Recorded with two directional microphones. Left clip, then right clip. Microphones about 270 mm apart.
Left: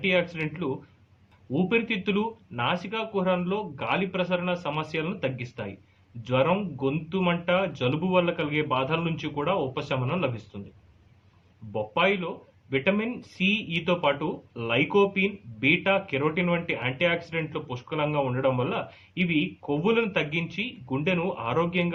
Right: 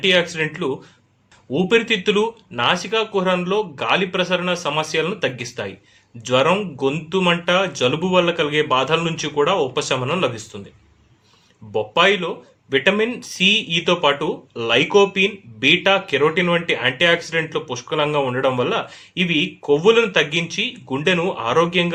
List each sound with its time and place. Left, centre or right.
0.0 s speech: centre
11.7 s speech: centre